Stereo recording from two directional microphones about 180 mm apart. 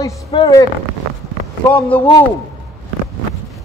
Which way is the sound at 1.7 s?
10° left (ahead or behind).